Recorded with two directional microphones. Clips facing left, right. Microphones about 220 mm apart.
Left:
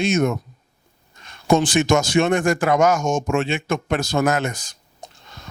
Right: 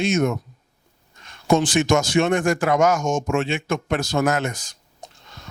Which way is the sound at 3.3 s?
20° left (ahead or behind).